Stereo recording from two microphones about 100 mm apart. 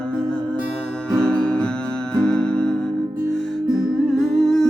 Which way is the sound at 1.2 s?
10° left (ahead or behind).